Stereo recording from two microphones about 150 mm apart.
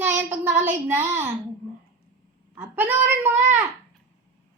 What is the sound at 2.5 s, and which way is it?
Speech, 15° right (ahead or behind).